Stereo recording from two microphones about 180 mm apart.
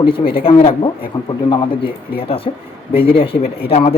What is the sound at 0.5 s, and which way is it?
A woman's voice, 30° left (ahead or behind).